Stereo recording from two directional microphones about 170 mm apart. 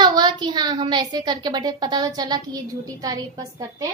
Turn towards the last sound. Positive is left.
turn(degrees=-20)  # may be behind; listen again after turning